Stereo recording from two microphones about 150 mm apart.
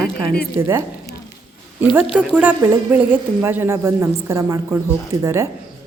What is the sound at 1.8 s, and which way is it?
A woman's voice, 10° right (ahead or behind).